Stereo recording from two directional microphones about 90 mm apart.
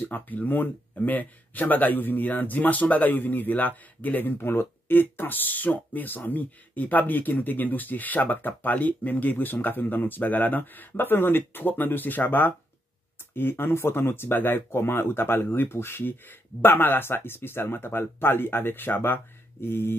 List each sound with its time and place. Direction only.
0.0 s speech: 20° left (ahead or behind)